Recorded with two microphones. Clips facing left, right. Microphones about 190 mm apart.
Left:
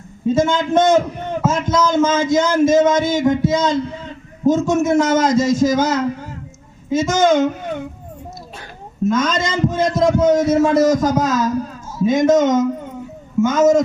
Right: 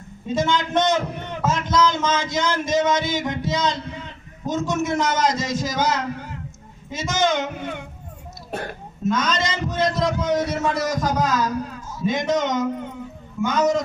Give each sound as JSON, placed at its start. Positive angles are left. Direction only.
{"t": 0.3, "sound": "a man's voice", "side_deg": 50}
{"t": 9.0, "sound": "a man's voice", "side_deg": 50}